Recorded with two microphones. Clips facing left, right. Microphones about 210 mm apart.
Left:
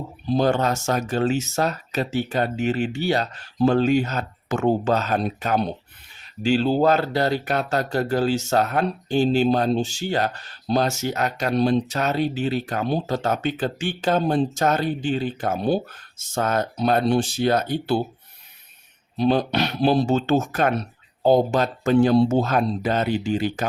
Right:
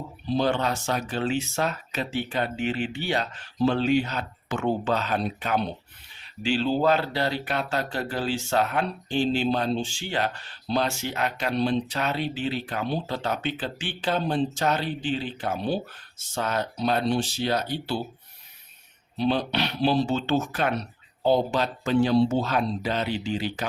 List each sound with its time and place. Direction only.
0.3 s speech: 45° left (ahead or behind)
19.1 s speech: 45° left (ahead or behind)